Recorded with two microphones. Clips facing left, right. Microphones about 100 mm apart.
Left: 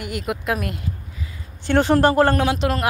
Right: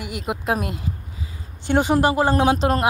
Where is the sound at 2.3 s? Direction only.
30° right (ahead or behind).